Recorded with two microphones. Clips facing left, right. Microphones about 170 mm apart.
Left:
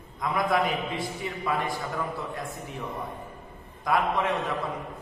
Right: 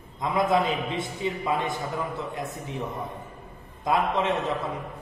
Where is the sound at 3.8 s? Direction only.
25° right (ahead or behind).